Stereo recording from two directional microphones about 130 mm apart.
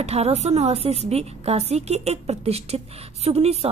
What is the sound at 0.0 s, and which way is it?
A woman's voice, 55° right (ahead or behind).